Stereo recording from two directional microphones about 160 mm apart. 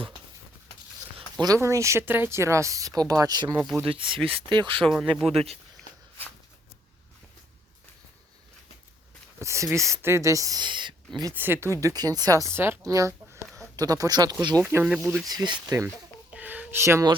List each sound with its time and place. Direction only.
1.4 s speech: 20° right (ahead or behind)
4.8 s speech: centre (ahead or behind)
5.3 s speech: 40° right (ahead or behind)
9.4 s a sound: 20° right (ahead or behind)
9.7 s speech: 20° right (ahead or behind)
11.2 s speech: 15° right (ahead or behind)
14.6 s speech: 10° right (ahead or behind)
15.3 s speech: 25° right (ahead or behind)
16.3 s a sound: 10° right (ahead or behind)